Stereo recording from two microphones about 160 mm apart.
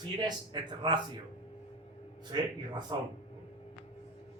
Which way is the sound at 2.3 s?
25° right (ahead or behind).